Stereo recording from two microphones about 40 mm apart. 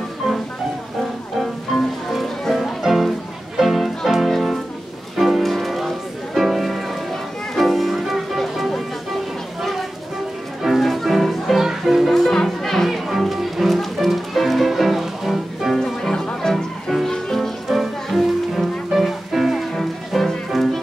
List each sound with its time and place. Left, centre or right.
1.4 s music: centre
12.1 s music: centre
12.9 s music: centre
15.8 s music: centre
17.6 s music: centre